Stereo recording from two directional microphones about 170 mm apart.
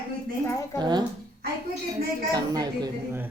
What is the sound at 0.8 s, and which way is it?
Speech, 25° right (ahead or behind).